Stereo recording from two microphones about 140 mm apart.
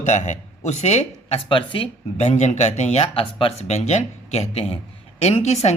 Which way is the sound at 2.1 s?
55° left (ahead or behind).